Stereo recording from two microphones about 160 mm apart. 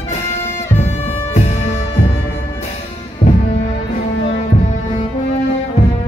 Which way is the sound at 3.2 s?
45° left (ahead or behind).